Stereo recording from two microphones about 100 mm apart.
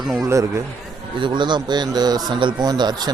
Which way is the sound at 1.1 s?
50° right (ahead or behind).